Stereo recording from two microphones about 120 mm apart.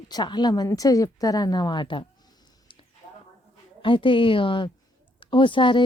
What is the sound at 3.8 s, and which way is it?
Speech, 45° left (ahead or behind).